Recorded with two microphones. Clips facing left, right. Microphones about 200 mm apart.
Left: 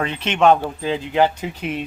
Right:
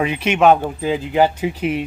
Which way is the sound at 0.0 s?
10° right (ahead or behind).